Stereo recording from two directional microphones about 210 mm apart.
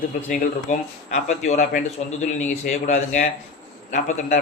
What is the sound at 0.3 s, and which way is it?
A man's voice, 35° left (ahead or behind).